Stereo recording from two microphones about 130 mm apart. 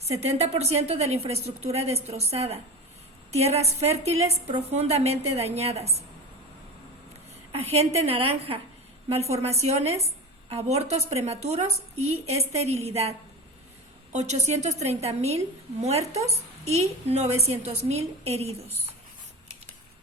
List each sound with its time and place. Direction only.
0.0 s a woman's voice: 55° right (ahead or behind)
7.5 s a woman's voice: 50° right (ahead or behind)